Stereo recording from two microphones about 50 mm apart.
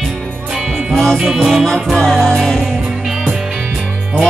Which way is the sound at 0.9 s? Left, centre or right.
Centre.